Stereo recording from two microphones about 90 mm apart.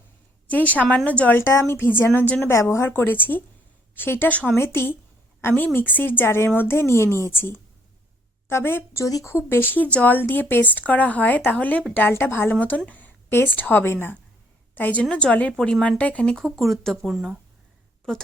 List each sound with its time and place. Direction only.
0.4 s a woman's voice: 15° left (ahead or behind)
2.5 s a woman's voice: 30° left (ahead or behind)
9.0 s speech: 40° left (ahead or behind)
9.3 s a woman's voice: 25° left (ahead or behind); by 17.2 s 5° left (ahead or behind)